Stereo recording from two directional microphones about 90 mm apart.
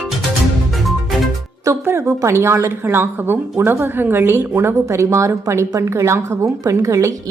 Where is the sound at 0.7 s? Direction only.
Centre (ahead or behind).